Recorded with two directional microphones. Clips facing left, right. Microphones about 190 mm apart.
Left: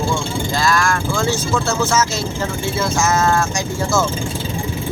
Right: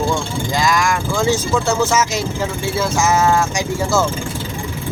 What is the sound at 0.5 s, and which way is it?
Speech, 15° right (ahead or behind).